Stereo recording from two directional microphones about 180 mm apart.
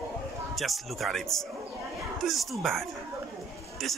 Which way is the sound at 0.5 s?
Centre (ahead or behind).